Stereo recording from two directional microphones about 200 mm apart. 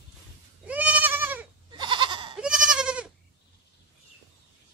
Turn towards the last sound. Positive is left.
turn(degrees=-5)  # may be behind; listen again after turning